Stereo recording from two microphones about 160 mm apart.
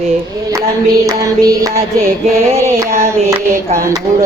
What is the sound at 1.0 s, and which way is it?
Speech, 20° right (ahead or behind).